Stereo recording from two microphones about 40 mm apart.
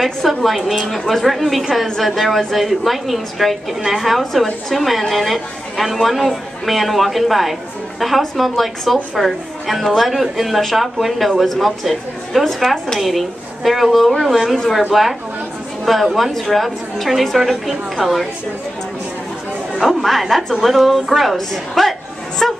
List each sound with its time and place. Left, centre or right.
0.0 s a woman's voice: centre
13.0 s a woman's voice: centre
20.0 s a woman's voice: centre